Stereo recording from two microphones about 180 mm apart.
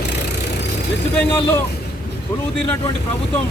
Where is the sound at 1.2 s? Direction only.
10° left (ahead or behind).